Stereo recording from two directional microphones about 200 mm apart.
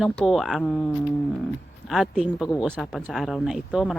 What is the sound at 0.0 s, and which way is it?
Speech, centre (ahead or behind).